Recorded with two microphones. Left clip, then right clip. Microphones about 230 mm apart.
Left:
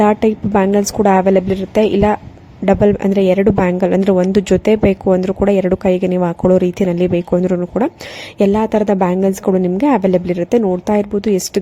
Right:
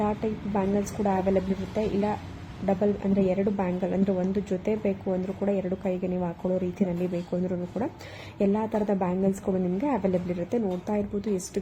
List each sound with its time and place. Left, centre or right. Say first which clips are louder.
0.0 s a woman's voice: left 16 dB; left